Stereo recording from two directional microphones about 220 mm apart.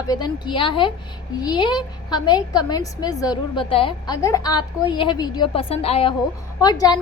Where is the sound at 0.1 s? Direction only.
20° left (ahead or behind).